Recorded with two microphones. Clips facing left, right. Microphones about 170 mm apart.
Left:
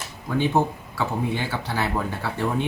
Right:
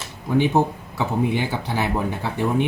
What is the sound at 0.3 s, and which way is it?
Speech, 15° right (ahead or behind).